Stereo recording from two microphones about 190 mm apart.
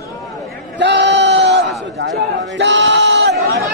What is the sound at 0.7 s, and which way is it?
Sheep, 65° right (ahead or behind).